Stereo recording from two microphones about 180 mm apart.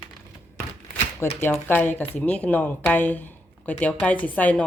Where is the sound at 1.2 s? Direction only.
15° left (ahead or behind).